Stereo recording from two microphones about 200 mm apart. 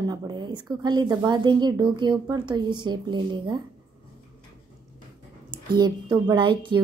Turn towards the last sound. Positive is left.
turn(degrees=-25)  # may be behind; listen again after turning